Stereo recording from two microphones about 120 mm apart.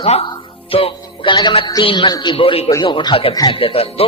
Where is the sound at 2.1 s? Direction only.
35° left (ahead or behind).